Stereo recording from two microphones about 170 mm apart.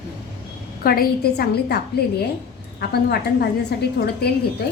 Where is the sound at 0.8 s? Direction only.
60° left (ahead or behind).